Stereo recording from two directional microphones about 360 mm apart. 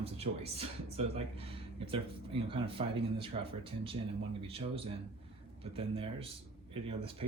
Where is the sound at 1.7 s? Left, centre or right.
Centre.